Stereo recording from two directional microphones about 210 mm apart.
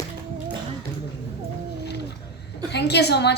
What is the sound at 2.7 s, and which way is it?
Speech, 50° left (ahead or behind).